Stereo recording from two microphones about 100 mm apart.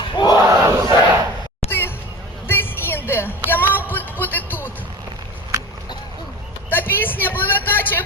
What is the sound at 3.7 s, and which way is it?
Music, 20° left (ahead or behind).